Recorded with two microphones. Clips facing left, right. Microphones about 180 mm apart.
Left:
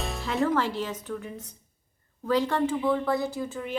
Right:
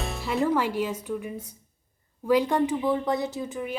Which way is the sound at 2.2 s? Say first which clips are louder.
Right 3 dB; 15° right (ahead or behind).